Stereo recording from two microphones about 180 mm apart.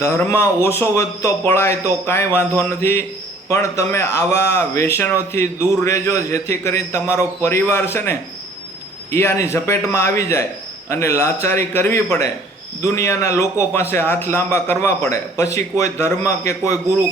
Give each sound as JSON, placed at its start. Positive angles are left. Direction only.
{"t": 0.0, "sound": "speech", "side_deg": 15}
{"t": 9.1, "sound": "speech", "side_deg": 15}